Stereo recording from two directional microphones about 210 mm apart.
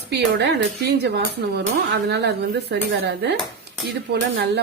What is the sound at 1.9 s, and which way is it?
Speech, 55° right (ahead or behind).